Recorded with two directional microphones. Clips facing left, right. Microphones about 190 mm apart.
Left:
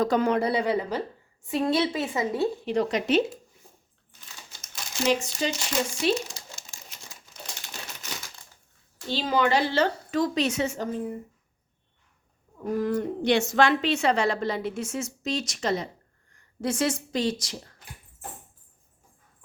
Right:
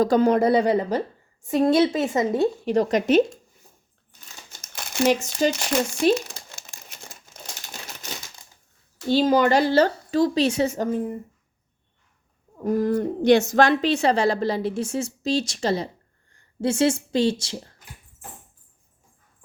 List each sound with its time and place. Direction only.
0.0 s a woman's voice: 35° right (ahead or behind)
4.6 s crumpling: 60° right (ahead or behind)
9.0 s a woman's voice: 45° right (ahead or behind)
12.6 s a woman's voice: 35° right (ahead or behind)